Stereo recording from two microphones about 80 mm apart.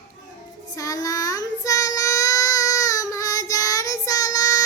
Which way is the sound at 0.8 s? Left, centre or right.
Left.